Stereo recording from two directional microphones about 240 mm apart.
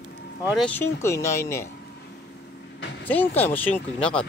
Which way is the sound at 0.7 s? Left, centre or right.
Centre.